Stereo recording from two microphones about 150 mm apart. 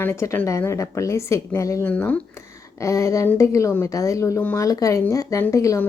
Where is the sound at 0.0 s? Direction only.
15° left (ahead or behind).